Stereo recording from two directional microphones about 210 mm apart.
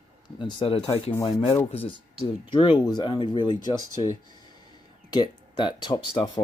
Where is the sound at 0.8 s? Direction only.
25° left (ahead or behind).